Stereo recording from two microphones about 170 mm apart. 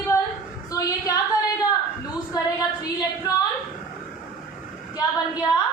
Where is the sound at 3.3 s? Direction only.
20° left (ahead or behind).